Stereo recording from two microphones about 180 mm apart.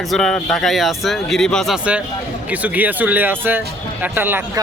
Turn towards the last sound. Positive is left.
turn(degrees=-10)  # may be behind; listen again after turning